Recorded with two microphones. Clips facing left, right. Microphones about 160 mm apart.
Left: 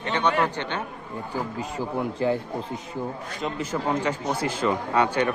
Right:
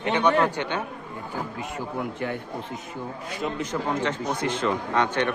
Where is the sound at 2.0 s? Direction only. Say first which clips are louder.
Left 6 dB; 30° left (ahead or behind).